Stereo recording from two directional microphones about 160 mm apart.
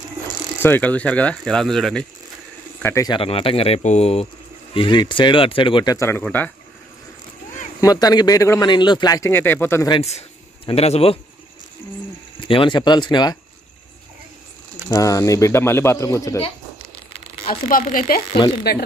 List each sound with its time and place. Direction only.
0.6 s speech: 10° left (ahead or behind)
2.8 s speech: 15° left (ahead or behind)
3.1 s speech: 35° left (ahead or behind)
5.9 s speech: 15° left (ahead or behind)
7.8 s a man's voice: 25° left (ahead or behind)
9.8 s speech: 40° left (ahead or behind)
12.4 s a man's voice: 30° left (ahead or behind)
14.9 s a man's voice: 20° left (ahead or behind)
17.1 s a sound: 40° left (ahead or behind)
17.5 s speech: 55° left (ahead or behind)
18.6 s speech: 90° left